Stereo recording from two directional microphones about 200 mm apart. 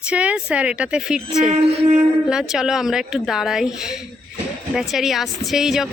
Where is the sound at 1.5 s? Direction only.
30° right (ahead or behind).